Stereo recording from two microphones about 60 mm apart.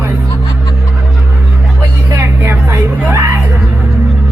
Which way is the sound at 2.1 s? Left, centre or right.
Right.